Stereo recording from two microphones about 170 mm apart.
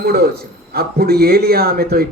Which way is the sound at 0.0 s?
65° right (ahead or behind).